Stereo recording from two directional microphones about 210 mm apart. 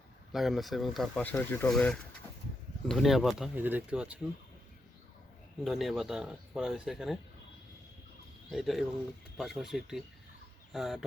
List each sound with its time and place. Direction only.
0.3 s speech: centre (ahead or behind)
5.6 s speech: centre (ahead or behind)
8.4 s speech: centre (ahead or behind)